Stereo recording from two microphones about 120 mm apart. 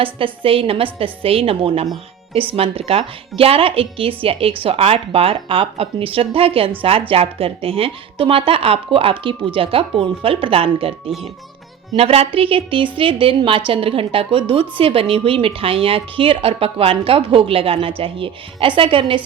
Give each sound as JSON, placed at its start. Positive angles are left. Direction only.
{"t": 0.0, "sound": "a woman's voice", "side_deg": -50}